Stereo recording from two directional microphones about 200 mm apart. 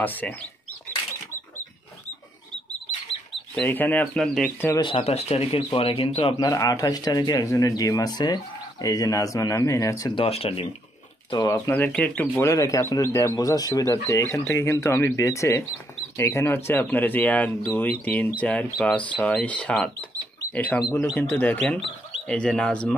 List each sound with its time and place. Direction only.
0.0 s speech: 10° left (ahead or behind)
3.5 s speech: 10° left (ahead or behind)
4.7 s speech: 25° left (ahead or behind)
10.2 s speech: 30° left (ahead or behind); by 22.9 s 5° left (ahead or behind)